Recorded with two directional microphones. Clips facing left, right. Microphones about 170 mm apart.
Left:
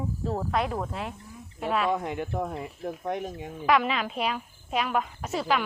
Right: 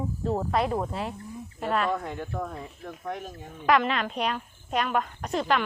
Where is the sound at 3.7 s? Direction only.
Centre (ahead or behind).